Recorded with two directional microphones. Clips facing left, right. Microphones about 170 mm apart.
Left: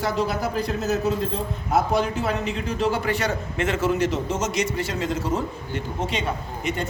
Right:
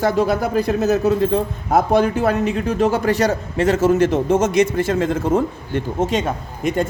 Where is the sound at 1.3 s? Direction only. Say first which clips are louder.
Right 6 dB; 55° right (ahead or behind).